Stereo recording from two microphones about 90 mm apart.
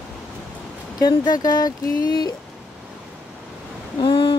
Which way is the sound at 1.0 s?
50° left (ahead or behind).